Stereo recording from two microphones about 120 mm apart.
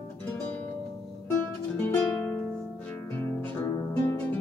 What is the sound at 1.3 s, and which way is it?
Music, 15° left (ahead or behind).